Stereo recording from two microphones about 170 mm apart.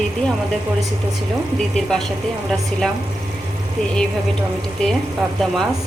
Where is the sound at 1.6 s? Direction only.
Centre (ahead or behind).